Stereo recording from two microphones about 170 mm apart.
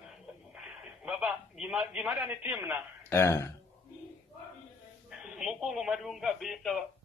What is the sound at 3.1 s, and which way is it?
Speech, 15° left (ahead or behind).